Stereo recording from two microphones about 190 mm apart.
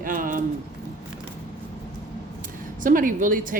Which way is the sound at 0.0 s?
45° right (ahead or behind).